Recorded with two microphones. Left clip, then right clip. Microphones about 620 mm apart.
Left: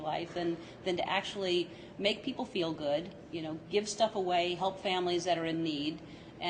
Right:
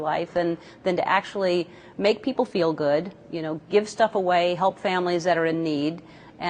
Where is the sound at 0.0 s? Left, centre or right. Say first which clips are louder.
Right 11 dB; right.